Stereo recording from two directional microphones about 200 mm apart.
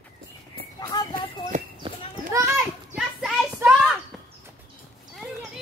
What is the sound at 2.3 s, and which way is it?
Children playing, 15° right (ahead or behind).